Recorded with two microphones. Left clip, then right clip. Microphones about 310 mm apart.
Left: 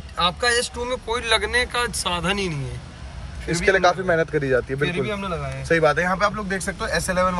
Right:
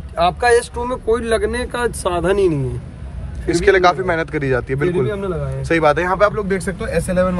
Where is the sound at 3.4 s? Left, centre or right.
Right.